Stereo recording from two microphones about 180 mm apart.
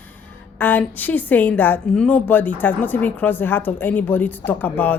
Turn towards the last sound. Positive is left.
turn(degrees=10)  # may be behind; listen again after turning